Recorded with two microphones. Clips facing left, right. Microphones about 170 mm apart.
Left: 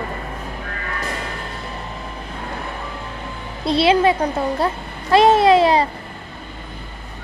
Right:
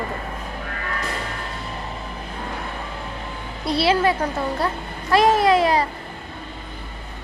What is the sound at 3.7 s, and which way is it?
A woman's voice, 20° left (ahead or behind).